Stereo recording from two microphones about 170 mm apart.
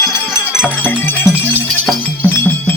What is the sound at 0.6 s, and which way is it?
Music, 10° left (ahead or behind).